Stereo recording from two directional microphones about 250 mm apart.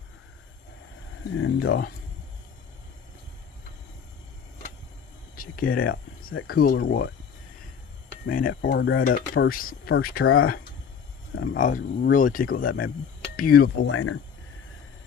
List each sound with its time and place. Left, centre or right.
1.4 s speech: left
5.4 s speech: left
8.3 s speech: left
9.1 s speech: left
10.2 s speech: left
11.5 s speech: left
13.9 s speech: left